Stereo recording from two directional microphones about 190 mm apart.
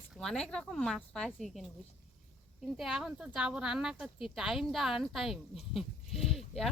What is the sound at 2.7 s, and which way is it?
Speech, centre (ahead or behind).